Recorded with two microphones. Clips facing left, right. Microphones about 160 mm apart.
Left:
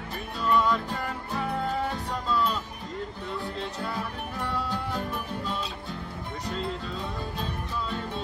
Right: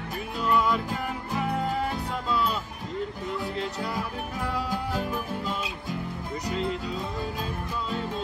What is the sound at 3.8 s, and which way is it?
Music, 10° right (ahead or behind).